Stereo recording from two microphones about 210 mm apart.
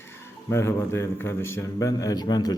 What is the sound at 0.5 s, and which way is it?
A man's voice, 10° left (ahead or behind).